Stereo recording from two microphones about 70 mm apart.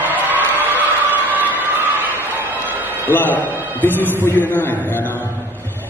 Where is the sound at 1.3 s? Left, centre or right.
Right.